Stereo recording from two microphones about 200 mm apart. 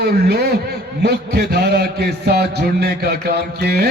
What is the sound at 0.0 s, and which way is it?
Mantra, 55° right (ahead or behind).